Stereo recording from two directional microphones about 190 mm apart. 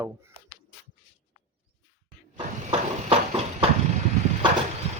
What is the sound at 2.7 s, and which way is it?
Clip-clop, 30° right (ahead or behind).